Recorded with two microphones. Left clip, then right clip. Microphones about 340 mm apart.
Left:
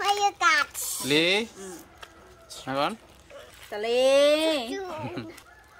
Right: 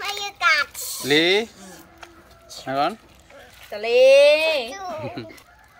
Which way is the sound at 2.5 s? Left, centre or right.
Centre.